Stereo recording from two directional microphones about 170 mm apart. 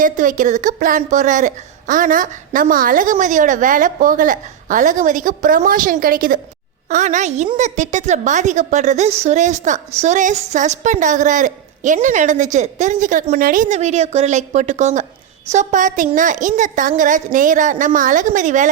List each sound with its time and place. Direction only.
0.0 s a woman's voice: 50° right (ahead or behind)